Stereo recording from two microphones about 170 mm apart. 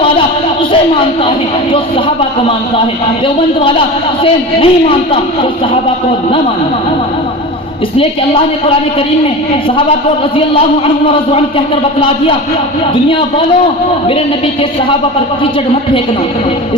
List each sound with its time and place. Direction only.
1.7 s a man's voice: 30° left (ahead or behind)
10.3 s a man's voice: 30° left (ahead or behind)